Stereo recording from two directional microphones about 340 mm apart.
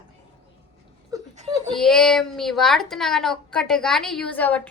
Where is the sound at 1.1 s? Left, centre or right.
Centre.